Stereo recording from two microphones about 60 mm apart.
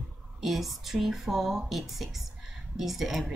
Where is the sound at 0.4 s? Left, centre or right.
Centre.